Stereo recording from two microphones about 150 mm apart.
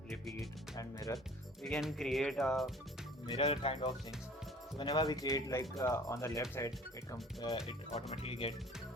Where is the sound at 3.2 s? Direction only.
40° left (ahead or behind); by 7.1 s 20° left (ahead or behind).